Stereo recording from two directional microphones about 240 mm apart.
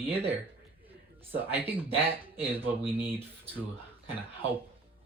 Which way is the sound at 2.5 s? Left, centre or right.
Centre.